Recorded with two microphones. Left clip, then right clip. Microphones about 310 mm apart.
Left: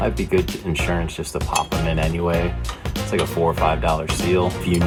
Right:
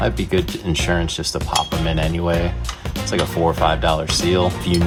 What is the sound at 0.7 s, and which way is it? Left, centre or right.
Speech, right.